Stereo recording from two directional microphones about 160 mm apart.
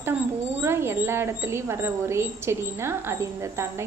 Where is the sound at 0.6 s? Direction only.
15° right (ahead or behind).